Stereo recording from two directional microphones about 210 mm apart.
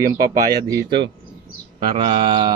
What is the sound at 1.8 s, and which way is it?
Mantra, 20° right (ahead or behind).